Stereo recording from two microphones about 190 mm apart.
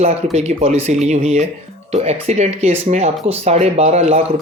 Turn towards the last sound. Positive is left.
turn(degrees=-35)  # may be behind; listen again after turning